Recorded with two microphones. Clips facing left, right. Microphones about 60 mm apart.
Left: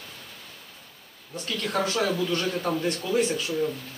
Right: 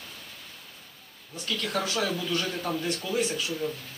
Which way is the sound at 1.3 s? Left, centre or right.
Left.